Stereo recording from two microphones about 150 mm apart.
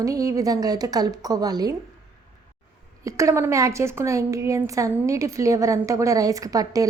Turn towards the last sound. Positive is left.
turn(degrees=-25)  # may be behind; listen again after turning